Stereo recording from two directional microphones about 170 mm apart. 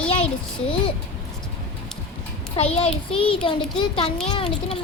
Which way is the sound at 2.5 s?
35° left (ahead or behind).